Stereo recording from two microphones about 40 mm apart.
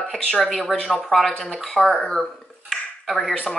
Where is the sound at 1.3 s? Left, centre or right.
Centre.